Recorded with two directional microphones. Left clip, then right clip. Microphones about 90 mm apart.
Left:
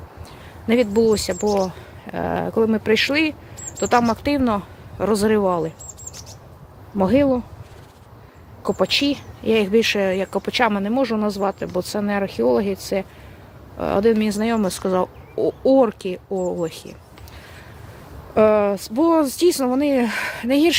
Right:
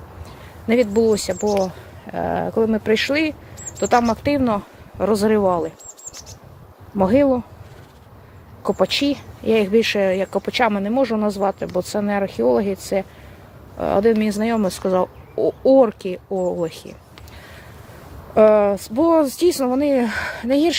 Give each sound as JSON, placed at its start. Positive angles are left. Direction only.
{"t": 0.7, "sound": "speech", "side_deg": 45}
{"t": 2.0, "sound": "speech", "side_deg": 75}
{"t": 6.9, "sound": "speech", "side_deg": 25}
{"t": 8.6, "sound": "speech", "side_deg": 25}
{"t": 18.3, "sound": "speech", "side_deg": 35}